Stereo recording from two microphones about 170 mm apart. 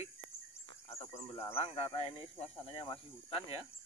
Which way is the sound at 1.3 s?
30° left (ahead or behind).